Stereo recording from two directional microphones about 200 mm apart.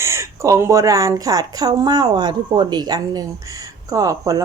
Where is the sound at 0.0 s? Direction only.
15° right (ahead or behind).